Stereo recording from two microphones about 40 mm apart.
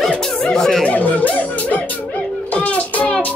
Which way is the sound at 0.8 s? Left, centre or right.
Left.